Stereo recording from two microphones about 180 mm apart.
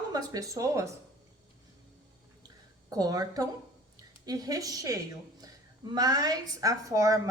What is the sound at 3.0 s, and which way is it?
A woman's voice, 20° right (ahead or behind).